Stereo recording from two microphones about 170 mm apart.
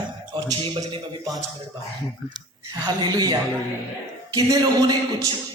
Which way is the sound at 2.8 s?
25° right (ahead or behind).